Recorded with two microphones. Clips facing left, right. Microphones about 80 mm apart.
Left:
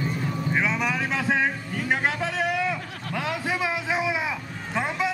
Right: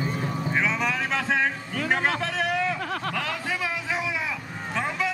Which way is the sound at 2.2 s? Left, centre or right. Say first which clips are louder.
Even; centre.